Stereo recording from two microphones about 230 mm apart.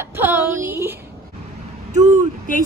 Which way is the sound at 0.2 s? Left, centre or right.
Centre.